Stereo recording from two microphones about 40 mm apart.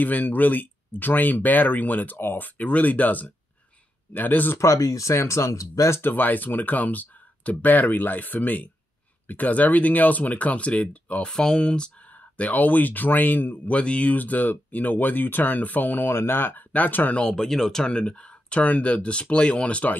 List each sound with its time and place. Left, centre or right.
0.0 s speech: left
5.9 s speech: left
11.2 s speech: centre
12.1 s speech: left
13.7 s speech: left
14.1 s speech: left
16.1 s speech: left
17.1 s speech: left
17.4 s speech: centre
17.9 s speech: left